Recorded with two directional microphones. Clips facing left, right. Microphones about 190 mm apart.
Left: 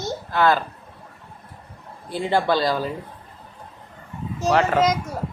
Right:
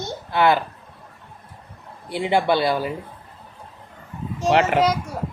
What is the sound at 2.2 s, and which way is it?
Speech, 15° right (ahead or behind).